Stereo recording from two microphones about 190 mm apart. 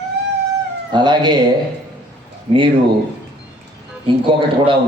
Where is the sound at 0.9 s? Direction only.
25° right (ahead or behind).